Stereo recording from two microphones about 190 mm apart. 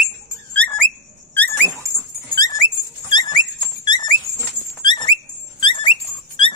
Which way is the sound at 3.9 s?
20° left (ahead or behind).